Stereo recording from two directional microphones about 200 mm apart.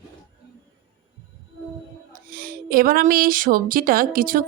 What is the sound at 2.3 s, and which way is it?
Speech, 45° right (ahead or behind).